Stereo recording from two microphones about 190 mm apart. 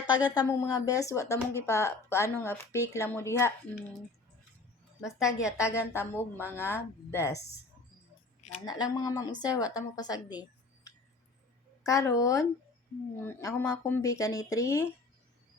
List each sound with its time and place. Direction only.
0.1 s speech: 20° left (ahead or behind)
5.0 s a woman's voice: centre (ahead or behind)
5.5 s speech: 15° left (ahead or behind)
8.6 s speech: 20° left (ahead or behind)
11.8 s speech: 15° left (ahead or behind)